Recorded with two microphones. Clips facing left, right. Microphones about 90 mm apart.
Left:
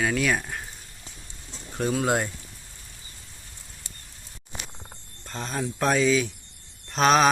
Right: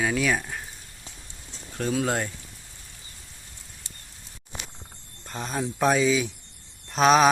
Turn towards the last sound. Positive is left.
turn(degrees=-5)  # may be behind; listen again after turning